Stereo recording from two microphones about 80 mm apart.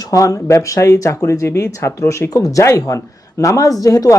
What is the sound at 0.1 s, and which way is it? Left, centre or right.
Speech, left.